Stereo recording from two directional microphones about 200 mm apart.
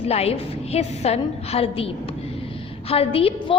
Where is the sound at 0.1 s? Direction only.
30° left (ahead or behind).